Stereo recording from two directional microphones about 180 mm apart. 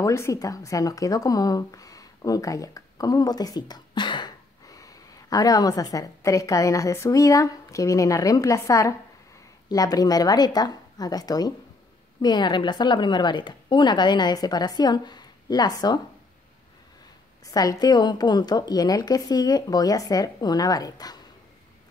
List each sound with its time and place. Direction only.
0.0 s speech: 15° left (ahead or behind)
17.5 s speech: 20° left (ahead or behind)